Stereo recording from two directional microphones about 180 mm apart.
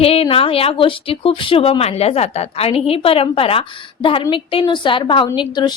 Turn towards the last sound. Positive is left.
turn(degrees=25)  # may be behind; listen again after turning